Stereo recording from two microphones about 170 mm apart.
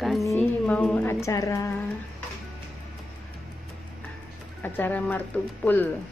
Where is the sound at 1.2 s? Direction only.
20° left (ahead or behind).